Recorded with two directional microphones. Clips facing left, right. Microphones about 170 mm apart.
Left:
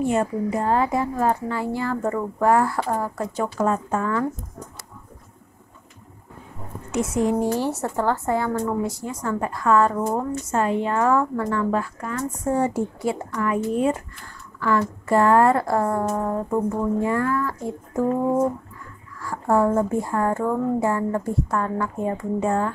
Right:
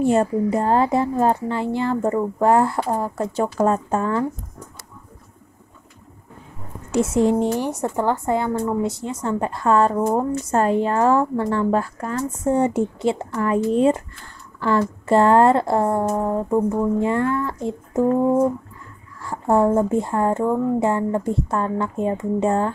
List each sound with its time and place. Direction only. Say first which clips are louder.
0.0 s a woman's voice: right 4 dB; 30° right (ahead or behind)
6.9 s a woman's voice: right 4 dB; 30° right (ahead or behind)
7.5 s a woman's voice: right 1 dB; 15° right (ahead or behind); by 12.2 s 35° right (ahead or behind)
12.4 s a woman's voice: right 3 dB; 20° right (ahead or behind)
19.2 s a woman's voice: right 2 dB; 20° right (ahead or behind)